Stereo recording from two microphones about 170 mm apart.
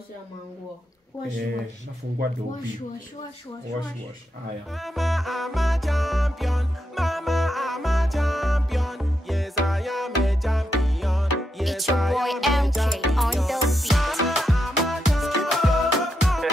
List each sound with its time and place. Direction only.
4.7 s music: centre (ahead or behind)